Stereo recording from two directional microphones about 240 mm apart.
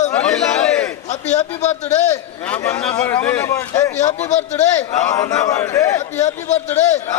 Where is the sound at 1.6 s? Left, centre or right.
Left.